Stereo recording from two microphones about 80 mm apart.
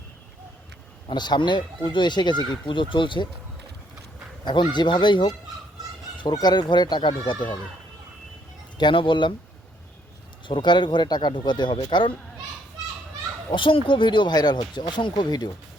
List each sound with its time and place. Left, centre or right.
1.0 s speech: left
2.6 s speech: left
4.4 s speech: left
6.4 s speech: left
8.8 s speech: left
10.4 s speech: left
13.5 s speech: left